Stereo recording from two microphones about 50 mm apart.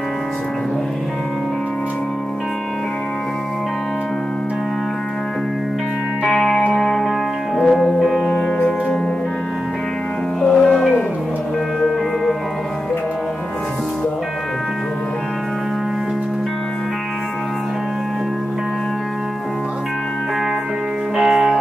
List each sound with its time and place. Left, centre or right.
6.2 s music: centre
8.3 s music: centre
10.4 s music: centre
21.2 s music: centre